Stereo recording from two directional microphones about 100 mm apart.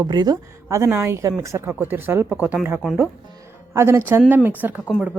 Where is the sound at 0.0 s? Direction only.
45° right (ahead or behind).